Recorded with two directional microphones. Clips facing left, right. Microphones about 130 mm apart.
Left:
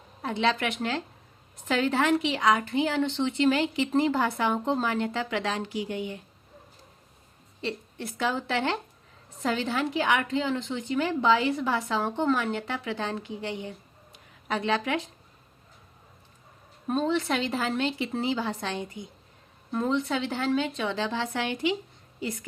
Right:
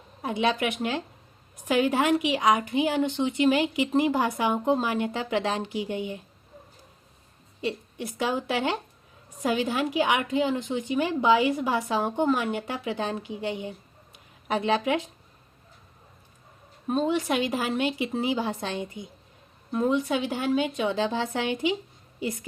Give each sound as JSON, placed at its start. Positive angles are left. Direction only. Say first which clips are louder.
{"t": 0.2, "sound": "a woman's voice", "louder": "right 1 dB", "side_deg": -15}
{"t": 7.6, "sound": "a woman's voice", "louder": "right 3 dB", "side_deg": -15}
{"t": 16.8, "sound": "a woman's voice", "louder": "right 1 dB", "side_deg": -5}
{"t": 17.2, "sound": "a woman's voice", "louder": "right 2 dB", "side_deg": -15}